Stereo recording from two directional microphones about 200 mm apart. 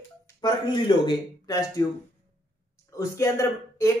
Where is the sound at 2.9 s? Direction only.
15° left (ahead or behind).